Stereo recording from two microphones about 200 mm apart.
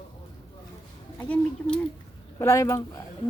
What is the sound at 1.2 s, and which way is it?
A woman's voice, 5° left (ahead or behind).